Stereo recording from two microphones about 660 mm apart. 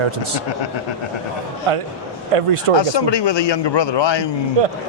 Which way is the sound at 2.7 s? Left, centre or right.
Left.